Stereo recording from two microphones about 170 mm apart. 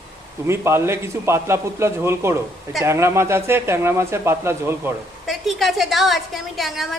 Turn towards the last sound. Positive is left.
turn(degrees=0)  # may be behind; listen again after turning